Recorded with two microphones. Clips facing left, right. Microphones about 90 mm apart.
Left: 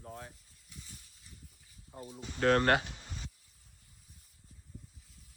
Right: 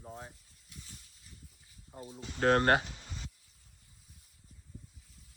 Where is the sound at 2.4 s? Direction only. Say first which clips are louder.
Right 1 dB; 35° right (ahead or behind).